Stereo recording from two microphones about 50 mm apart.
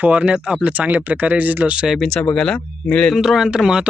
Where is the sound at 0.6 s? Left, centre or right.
Right.